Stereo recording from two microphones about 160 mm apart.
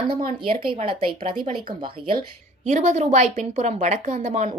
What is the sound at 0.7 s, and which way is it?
Speech, 30° right (ahead or behind).